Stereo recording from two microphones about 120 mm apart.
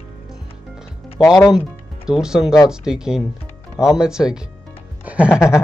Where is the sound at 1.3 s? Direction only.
30° left (ahead or behind).